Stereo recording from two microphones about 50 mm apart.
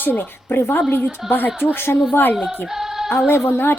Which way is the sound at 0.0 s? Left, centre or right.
Left.